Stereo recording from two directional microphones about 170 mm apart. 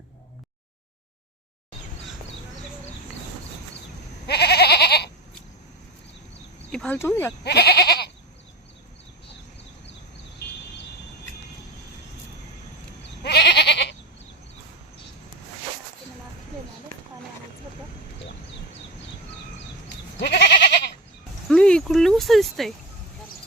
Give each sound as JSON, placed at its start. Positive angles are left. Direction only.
{"t": 4.3, "sound": "goat", "side_deg": 75}
{"t": 6.7, "sound": "speech", "side_deg": 5}
{"t": 7.4, "sound": "goat", "side_deg": 75}
{"t": 13.0, "sound": "goat", "side_deg": 80}
{"t": 20.1, "sound": "goat", "side_deg": 85}
{"t": 21.4, "sound": "a sound", "side_deg": 5}